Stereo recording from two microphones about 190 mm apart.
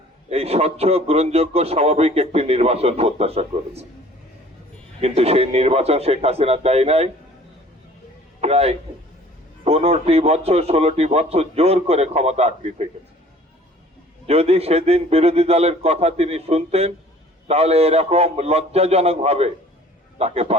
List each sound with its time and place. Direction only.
0.3 s a man's voice: 35° right (ahead or behind)
4.9 s a man's voice: 30° right (ahead or behind)
8.4 s a man's voice: 35° right (ahead or behind)
14.3 s a man's voice: 35° right (ahead or behind)